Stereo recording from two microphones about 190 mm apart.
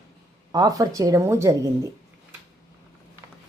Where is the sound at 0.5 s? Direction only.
20° right (ahead or behind).